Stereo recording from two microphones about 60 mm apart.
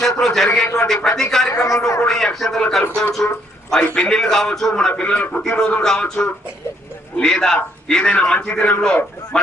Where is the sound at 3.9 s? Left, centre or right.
Centre.